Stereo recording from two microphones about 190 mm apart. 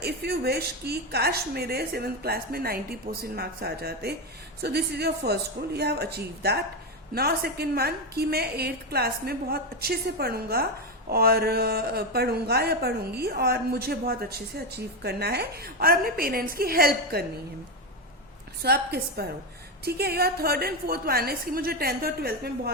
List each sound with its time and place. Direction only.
0.0 s a woman's voice: 55° right (ahead or behind)
18.6 s a woman's voice: 55° right (ahead or behind)